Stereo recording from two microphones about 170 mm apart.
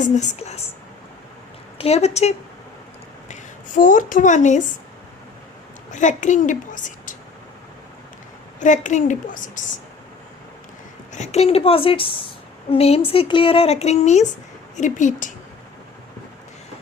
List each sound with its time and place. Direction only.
0.0 s a woman's voice: 45° left (ahead or behind)
1.8 s a woman's voice: 40° left (ahead or behind)
3.8 s a woman's voice: 50° left (ahead or behind)
5.9 s a woman's voice: 45° left (ahead or behind)
8.5 s a woman's voice: 45° left (ahead or behind)
11.1 s a woman's voice: 40° left (ahead or behind)